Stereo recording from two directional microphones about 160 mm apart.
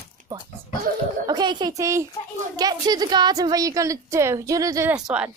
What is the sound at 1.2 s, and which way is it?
A woman's voice, 25° right (ahead or behind).